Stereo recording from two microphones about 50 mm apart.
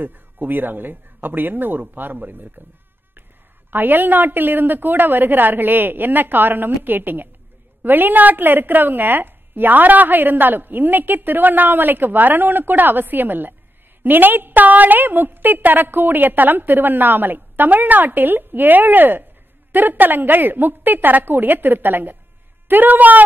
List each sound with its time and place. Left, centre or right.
0.0 s a woman's voice: right
3.7 s a woman's voice: right